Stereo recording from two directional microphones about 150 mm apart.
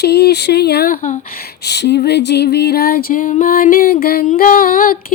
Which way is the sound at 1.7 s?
90° left.